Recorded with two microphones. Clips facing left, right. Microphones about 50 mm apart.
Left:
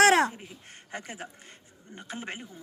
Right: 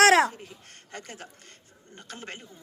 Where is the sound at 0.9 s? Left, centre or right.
Centre.